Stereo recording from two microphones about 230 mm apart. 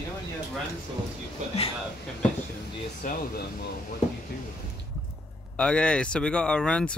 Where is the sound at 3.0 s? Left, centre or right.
Left.